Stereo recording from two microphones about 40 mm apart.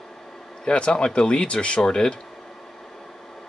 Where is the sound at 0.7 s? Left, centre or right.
Left.